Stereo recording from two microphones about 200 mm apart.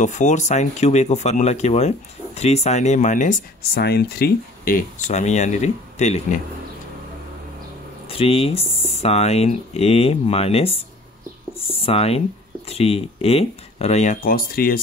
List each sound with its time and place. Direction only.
0.0 s speech: 35° left (ahead or behind)
8.1 s speech: 30° left (ahead or behind); by 14.8 s 45° left (ahead or behind)